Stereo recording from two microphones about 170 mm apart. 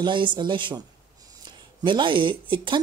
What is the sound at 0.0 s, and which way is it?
Speech, 30° right (ahead or behind).